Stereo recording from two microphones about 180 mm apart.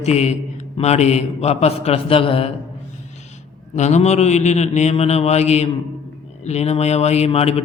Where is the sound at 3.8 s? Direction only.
40° left (ahead or behind).